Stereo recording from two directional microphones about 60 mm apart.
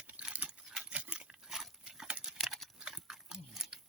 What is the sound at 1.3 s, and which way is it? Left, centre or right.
Pig, centre.